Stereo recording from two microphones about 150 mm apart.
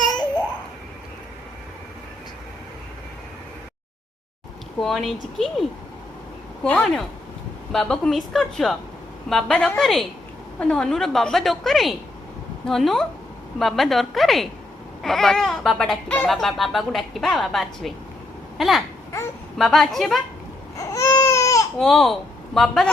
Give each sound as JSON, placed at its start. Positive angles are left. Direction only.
{"t": 0.0, "sound": "babbling", "side_deg": 30}
{"t": 4.8, "sound": "speech", "side_deg": 0}
{"t": 6.7, "sound": "speech", "side_deg": 10}
{"t": 18.5, "sound": "a sound", "side_deg": 0}
{"t": 19.5, "sound": "speech", "side_deg": 0}
{"t": 20.7, "sound": "baby cry", "side_deg": 20}
{"t": 21.8, "sound": "speech", "side_deg": 0}